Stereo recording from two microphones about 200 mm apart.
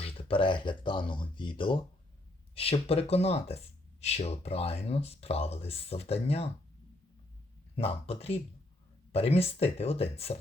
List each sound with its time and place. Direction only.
0.0 s speech: 25° left (ahead or behind)
7.8 s speech: 30° left (ahead or behind)